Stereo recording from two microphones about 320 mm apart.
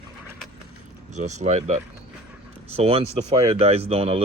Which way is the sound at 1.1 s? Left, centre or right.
Right.